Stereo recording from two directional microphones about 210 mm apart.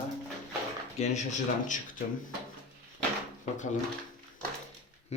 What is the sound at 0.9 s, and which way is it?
Speech, 35° left (ahead or behind).